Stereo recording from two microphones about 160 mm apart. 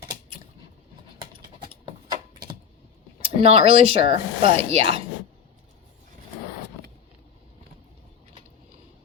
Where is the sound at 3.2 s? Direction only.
35° right (ahead or behind).